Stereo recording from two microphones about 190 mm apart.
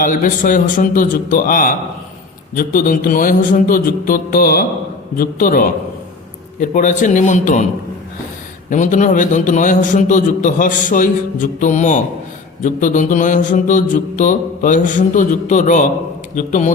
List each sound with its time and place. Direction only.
0.0 s a man's voice: 45° left (ahead or behind)
8.7 s a man's voice: 40° left (ahead or behind)